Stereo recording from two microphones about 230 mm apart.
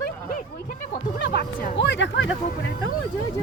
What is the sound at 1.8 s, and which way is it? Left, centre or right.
Speech, left.